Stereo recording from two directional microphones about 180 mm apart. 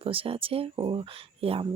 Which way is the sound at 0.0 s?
30° right (ahead or behind).